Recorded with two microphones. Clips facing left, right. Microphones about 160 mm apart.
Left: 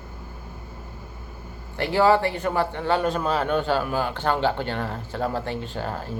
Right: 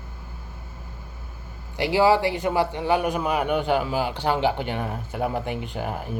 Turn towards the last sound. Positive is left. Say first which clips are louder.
# right 1 dB
turn(degrees=-15)  # may be behind; listen again after turning